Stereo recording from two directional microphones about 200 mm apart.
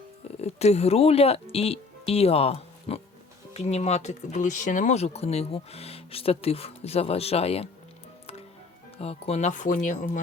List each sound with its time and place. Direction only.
0.4 s speech: 30° left (ahead or behind)
9.0 s speech: 30° left (ahead or behind)